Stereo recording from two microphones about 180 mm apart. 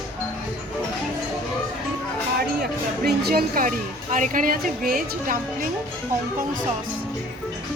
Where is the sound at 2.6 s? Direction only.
60° right (ahead or behind).